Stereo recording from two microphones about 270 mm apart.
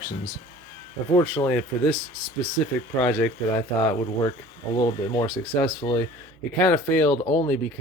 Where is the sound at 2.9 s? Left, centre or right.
Centre.